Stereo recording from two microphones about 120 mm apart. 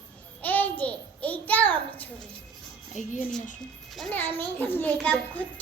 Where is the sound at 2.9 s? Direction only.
90° left.